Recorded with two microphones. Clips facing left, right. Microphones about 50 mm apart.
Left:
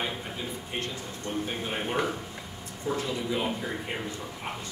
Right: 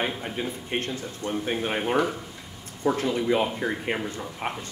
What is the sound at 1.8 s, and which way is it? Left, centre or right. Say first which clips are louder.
Speech: right 5 dB; right.